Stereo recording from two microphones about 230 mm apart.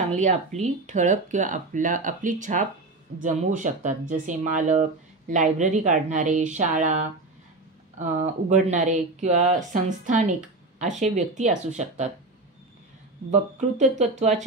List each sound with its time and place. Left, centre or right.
0.1 s speech: right
13.3 s speech: right